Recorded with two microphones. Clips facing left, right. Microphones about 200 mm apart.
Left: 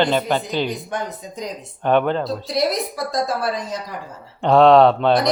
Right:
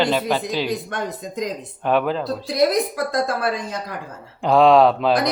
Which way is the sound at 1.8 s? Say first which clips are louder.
Left 2 dB; 5° right (ahead or behind).